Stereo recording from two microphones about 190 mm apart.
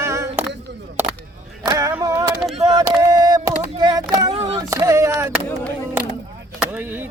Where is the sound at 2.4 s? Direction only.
Centre (ahead or behind).